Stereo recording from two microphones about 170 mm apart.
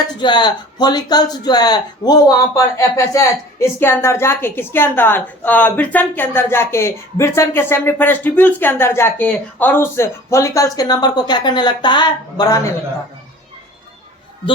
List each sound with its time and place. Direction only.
0.2 s speech: 25° left (ahead or behind)